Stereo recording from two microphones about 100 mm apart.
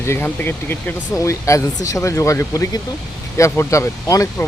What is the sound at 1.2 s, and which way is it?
Speech, 30° left (ahead or behind).